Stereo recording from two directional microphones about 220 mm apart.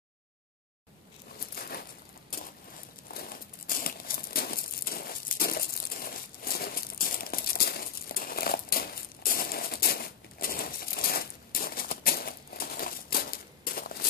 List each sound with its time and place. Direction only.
1.5 s crumpling: 45° left (ahead or behind)
3.2 s crumpling: 40° left (ahead or behind)